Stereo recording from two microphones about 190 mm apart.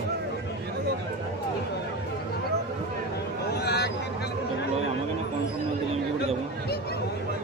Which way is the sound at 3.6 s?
60° left (ahead or behind).